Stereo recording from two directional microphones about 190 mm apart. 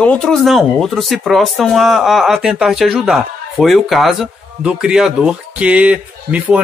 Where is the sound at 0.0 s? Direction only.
5° left (ahead or behind).